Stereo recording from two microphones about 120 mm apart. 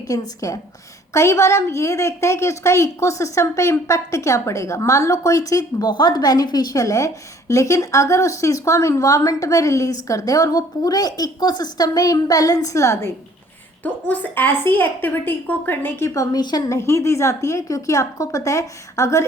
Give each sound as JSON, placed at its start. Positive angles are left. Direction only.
{"t": 0.1, "sound": "a woman's voice", "side_deg": 30}
{"t": 13.8, "sound": "a woman's voice", "side_deg": 15}